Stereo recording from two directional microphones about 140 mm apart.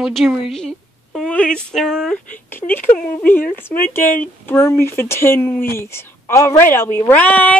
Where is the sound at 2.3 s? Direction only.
15° left (ahead or behind).